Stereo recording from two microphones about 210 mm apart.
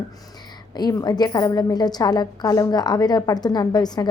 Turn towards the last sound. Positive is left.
turn(degrees=20)  # may be behind; listen again after turning